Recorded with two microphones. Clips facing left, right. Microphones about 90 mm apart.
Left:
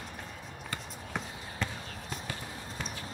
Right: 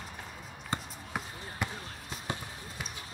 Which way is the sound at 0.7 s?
25° right (ahead or behind).